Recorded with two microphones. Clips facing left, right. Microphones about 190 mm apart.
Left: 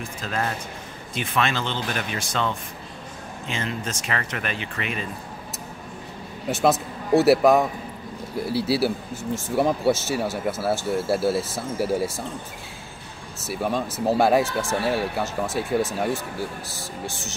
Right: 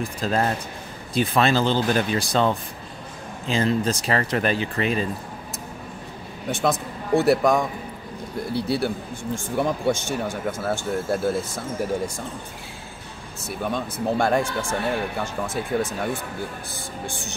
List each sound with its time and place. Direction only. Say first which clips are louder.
0.0 s speech: right 5 dB; 35° right (ahead or behind)
6.5 s speech: left 3 dB; 5° left (ahead or behind)
13.5 s speech: left 2 dB; 5° left (ahead or behind)